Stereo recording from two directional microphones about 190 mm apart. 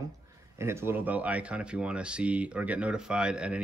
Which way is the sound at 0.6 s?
15° right (ahead or behind).